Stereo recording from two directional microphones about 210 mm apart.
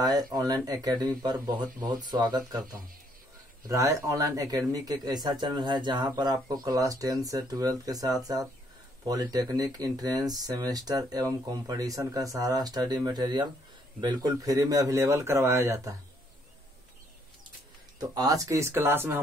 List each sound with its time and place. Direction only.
0.0 s speech: 20° right (ahead or behind)
17.9 s speech: 20° right (ahead or behind)